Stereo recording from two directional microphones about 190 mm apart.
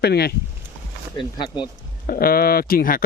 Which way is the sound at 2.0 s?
50° left (ahead or behind).